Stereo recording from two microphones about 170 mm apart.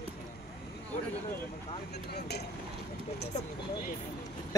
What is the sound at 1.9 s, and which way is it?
Speech, 70° left (ahead or behind).